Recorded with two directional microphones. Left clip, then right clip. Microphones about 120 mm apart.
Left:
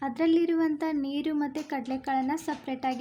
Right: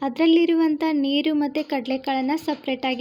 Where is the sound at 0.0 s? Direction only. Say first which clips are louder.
Right 7 dB; 20° right (ahead or behind).